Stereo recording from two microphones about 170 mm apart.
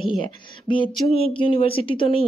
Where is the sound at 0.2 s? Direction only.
30° left (ahead or behind).